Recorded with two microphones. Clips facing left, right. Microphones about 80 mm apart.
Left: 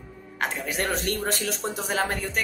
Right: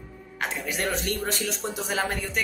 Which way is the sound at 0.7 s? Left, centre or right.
Left.